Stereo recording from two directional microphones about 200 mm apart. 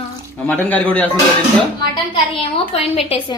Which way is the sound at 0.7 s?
5° left (ahead or behind).